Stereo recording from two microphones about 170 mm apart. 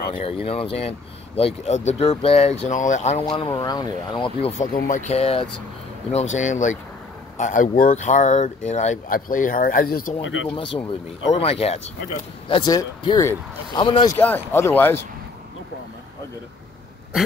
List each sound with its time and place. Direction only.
0.2 s speech: 35° left (ahead or behind)
4.7 s speech: 45° left (ahead or behind)
10.5 s speech: 30° left (ahead or behind)
14.1 s speech: 10° left (ahead or behind)